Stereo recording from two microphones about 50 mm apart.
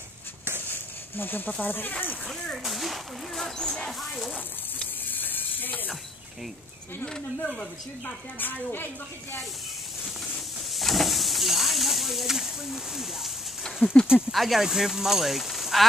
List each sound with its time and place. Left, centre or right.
0.7 s a sound: left
1.7 s speech: left
2.6 s speech: centre
3.5 s speech: centre
5.0 s a sound: left
7.1 s speech: centre
8.4 s speech: left
10.7 s a sound: centre
13.8 s speech: left
14.3 s speech: centre